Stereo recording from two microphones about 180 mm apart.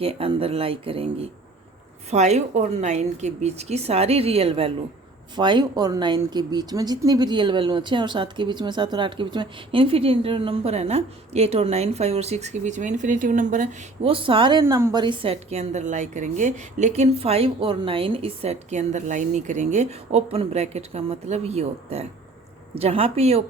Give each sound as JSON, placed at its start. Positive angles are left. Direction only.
{"t": 0.0, "sound": "a woman's voice", "side_deg": -30}
{"t": 14.0, "sound": "speech", "side_deg": -30}
{"t": 14.6, "sound": "a woman's voice", "side_deg": -15}
{"t": 15.0, "sound": "a woman's voice", "side_deg": -30}